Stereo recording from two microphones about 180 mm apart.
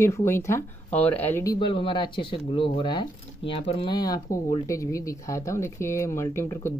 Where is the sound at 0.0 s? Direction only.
15° left (ahead or behind).